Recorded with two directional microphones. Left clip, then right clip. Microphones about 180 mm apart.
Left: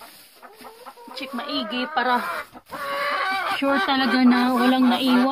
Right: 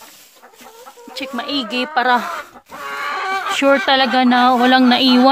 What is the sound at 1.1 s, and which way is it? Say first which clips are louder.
Speech: right 6 dB; 65° right (ahead or behind).